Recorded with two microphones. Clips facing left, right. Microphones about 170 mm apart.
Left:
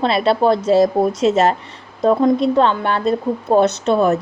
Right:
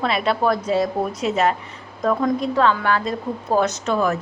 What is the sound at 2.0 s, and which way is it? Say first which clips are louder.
A woman's voice: left 6 dB; 25° left (ahead or behind).